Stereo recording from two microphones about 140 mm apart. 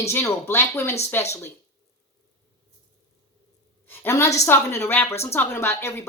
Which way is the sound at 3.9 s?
20° left (ahead or behind).